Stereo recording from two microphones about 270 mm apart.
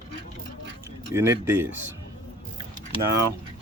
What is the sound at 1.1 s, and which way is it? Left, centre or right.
Speech, centre.